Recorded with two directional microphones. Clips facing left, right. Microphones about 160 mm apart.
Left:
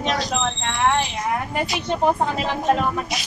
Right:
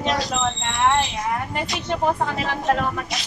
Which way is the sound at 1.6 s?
10° left (ahead or behind).